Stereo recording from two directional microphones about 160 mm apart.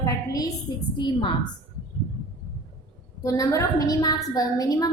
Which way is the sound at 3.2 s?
20° left (ahead or behind).